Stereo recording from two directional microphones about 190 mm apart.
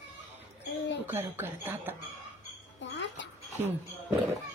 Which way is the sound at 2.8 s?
65° left (ahead or behind).